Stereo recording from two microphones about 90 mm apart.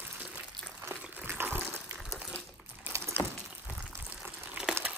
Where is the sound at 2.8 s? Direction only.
30° right (ahead or behind).